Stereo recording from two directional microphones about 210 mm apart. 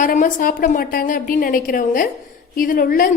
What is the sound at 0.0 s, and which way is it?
A woman's voice, 40° left (ahead or behind).